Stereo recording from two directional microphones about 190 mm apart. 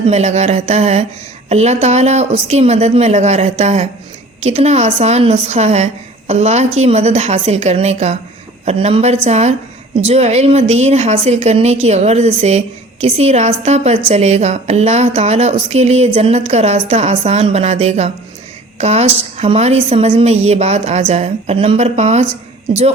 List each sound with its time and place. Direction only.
0.1 s a woman's voice: 35° right (ahead or behind)